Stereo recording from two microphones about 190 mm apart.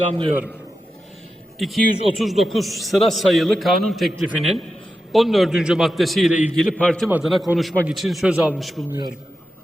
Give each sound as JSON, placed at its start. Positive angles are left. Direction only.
{"t": 0.1, "sound": "a man's voice", "side_deg": -30}
{"t": 1.5, "sound": "a man's voice", "side_deg": 0}
{"t": 7.1, "sound": "a man's voice", "side_deg": -5}
{"t": 8.9, "sound": "a man's voice", "side_deg": -20}